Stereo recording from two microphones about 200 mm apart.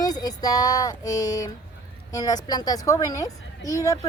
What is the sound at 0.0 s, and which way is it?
A woman's voice, 20° left (ahead or behind).